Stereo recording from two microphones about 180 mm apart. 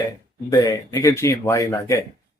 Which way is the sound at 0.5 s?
20° left (ahead or behind).